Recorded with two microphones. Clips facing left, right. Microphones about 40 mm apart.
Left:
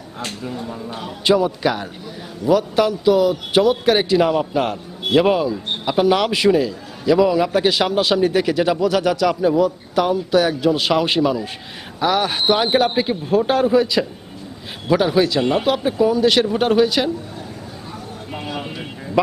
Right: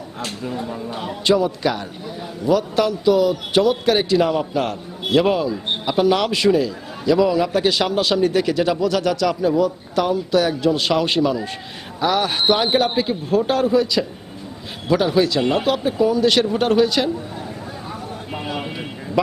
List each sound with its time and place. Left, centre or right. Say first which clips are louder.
0.4 s speech: right 4 dB; centre
1.2 s a man's voice: left 1 dB; centre
13.0 s a man's voice: left 1 dB; centre
18.3 s a sound: even; centre